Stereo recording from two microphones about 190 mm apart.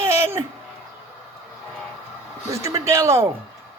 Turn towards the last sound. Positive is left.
turn(degrees=-15)  # may be behind; listen again after turning